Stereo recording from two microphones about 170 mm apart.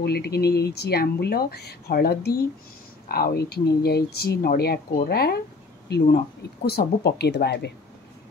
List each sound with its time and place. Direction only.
0.0 s speech: 70° left (ahead or behind)